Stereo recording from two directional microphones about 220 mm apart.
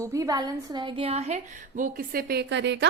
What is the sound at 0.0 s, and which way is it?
A woman's voice, 15° right (ahead or behind).